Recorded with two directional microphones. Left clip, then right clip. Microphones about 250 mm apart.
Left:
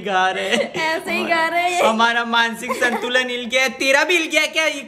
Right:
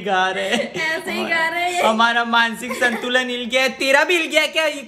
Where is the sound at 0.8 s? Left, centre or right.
Centre.